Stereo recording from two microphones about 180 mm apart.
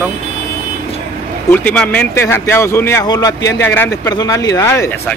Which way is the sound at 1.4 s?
5° left (ahead or behind).